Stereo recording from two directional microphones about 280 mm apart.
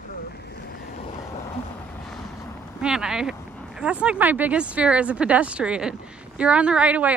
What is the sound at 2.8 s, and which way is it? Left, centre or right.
Speech, centre.